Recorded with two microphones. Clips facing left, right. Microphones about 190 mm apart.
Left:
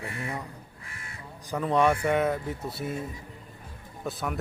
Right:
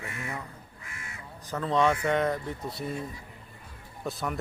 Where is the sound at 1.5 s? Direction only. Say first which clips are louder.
Left 2 dB; 10° left (ahead or behind).